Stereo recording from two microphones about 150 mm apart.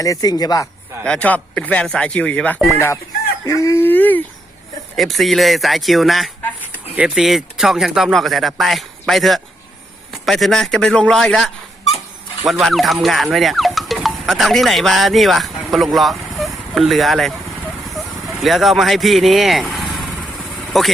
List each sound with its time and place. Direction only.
0.0 s speech: 25° left (ahead or behind)
1.0 s speech: 10° left (ahead or behind)
2.7 s speech: 20° left (ahead or behind)
4.9 s speech: centre (ahead or behind)
18.3 s speech: centre (ahead or behind)